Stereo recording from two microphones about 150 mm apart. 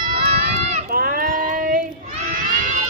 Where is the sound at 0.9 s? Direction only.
70° right (ahead or behind).